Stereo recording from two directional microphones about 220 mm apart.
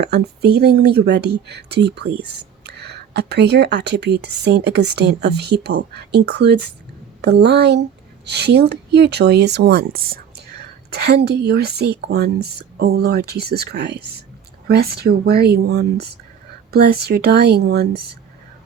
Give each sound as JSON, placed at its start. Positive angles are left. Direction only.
{"t": 0.0, "sound": "speech", "side_deg": -50}